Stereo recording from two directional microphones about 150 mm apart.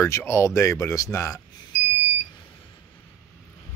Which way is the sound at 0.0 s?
20° left (ahead or behind).